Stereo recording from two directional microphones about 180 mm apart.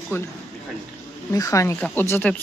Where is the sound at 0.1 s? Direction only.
15° left (ahead or behind).